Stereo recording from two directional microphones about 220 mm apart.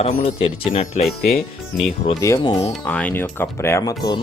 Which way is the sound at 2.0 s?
15° left (ahead or behind).